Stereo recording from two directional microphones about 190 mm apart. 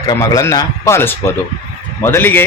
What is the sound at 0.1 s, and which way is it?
A man's voice, 15° left (ahead or behind).